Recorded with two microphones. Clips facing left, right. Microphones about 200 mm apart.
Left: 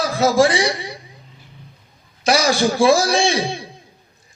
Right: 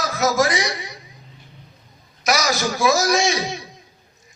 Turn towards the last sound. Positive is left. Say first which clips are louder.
# left 3 dB
turn(degrees=30)  # may be behind; listen again after turning